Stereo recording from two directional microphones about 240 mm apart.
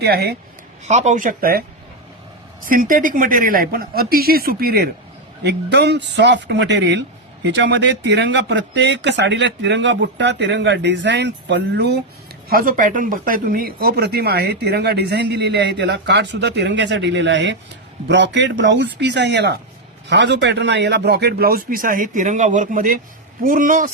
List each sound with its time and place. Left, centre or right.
0.0 s a man's voice: right
0.9 s a man's voice: right
2.6 s a man's voice: right